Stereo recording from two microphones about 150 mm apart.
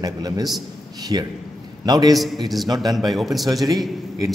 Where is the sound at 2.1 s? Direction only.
Centre (ahead or behind).